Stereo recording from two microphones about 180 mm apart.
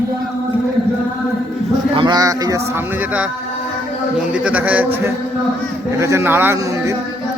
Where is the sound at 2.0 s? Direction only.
20° right (ahead or behind).